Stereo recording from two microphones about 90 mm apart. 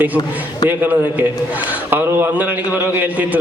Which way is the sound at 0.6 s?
20° right (ahead or behind).